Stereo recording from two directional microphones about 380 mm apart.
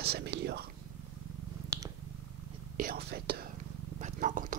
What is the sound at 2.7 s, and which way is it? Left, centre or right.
Whispering, right.